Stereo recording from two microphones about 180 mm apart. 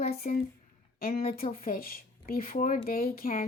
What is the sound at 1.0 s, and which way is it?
Speech, 55° left (ahead or behind).